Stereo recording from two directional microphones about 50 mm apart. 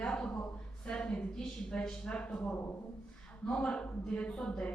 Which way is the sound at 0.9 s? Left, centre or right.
Centre.